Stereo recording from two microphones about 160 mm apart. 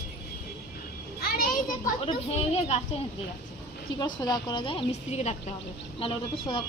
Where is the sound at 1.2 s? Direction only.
65° left (ahead or behind).